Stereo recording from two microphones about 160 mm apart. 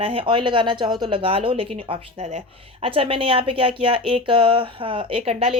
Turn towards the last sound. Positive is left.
turn(degrees=-35)  # may be behind; listen again after turning